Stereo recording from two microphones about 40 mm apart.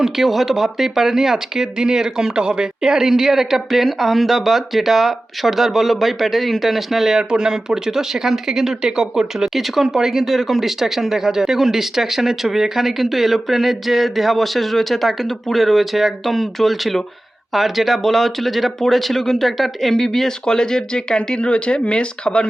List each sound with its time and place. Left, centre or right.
0.0 s speech: centre
7.2 s speech: right; by 22.4 s left